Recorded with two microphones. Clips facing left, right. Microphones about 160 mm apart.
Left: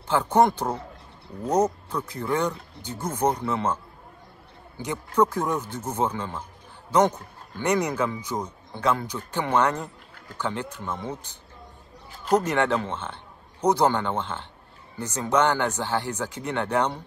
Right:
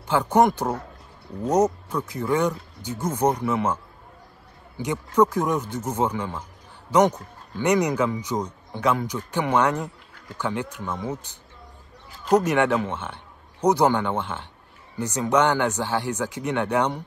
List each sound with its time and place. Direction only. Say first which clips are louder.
0.1 s a man's voice: right 1 dB; 10° right (ahead or behind)
12.3 s a man's voice: right 3 dB; 10° right (ahead or behind)